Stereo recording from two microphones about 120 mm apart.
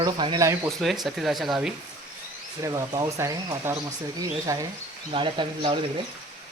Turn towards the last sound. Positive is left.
turn(degrees=-45)  # may be behind; listen again after turning